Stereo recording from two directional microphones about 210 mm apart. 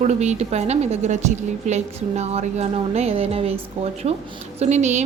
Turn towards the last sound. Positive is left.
turn(degrees=-35)  # may be behind; listen again after turning